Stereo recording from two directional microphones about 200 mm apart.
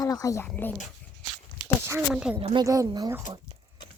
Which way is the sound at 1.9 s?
5° right (ahead or behind).